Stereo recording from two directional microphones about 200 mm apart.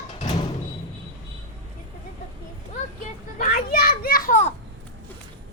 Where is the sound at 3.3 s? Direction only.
50° left (ahead or behind).